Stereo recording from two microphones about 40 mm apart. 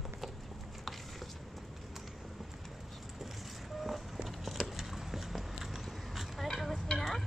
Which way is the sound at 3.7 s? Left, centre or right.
Centre.